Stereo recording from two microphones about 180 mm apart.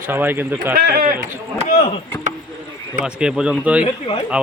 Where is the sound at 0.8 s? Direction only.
60° right (ahead or behind).